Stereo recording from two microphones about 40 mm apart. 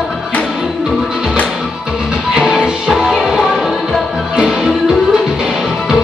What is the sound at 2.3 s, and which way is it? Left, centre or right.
Music, centre.